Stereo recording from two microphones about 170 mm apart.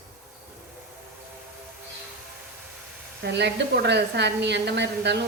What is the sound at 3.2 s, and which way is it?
A woman's voice, 80° right.